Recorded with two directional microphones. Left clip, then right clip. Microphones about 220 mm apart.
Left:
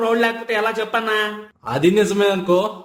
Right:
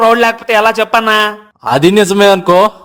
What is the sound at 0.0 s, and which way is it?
A man's voice, 50° right (ahead or behind).